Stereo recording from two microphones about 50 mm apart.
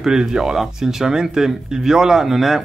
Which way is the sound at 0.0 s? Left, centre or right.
Centre.